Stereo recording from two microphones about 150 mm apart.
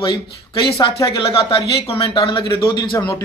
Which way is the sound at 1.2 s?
40° left (ahead or behind).